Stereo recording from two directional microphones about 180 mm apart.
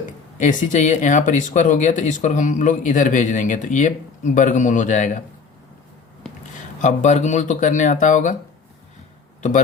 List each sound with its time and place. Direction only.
0.3 s speech: 45° left (ahead or behind)
6.8 s speech: 40° left (ahead or behind)